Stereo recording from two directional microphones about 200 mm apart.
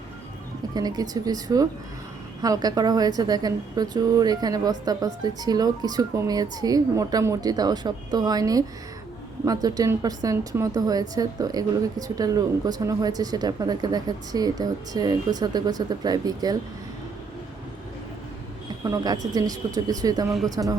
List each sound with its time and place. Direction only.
0.7 s speech: 20° right (ahead or behind)
18.9 s speech: 20° right (ahead or behind)